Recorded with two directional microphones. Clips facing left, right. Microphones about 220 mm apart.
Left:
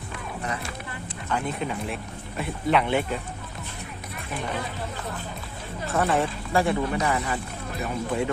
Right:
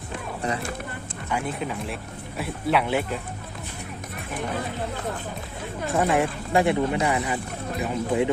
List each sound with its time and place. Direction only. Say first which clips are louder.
1.3 s speech: even; 5° right (ahead or behind)
5.9 s speech: right 2 dB; 15° right (ahead or behind)